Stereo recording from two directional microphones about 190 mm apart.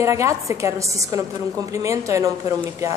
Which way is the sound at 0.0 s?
15° right (ahead or behind).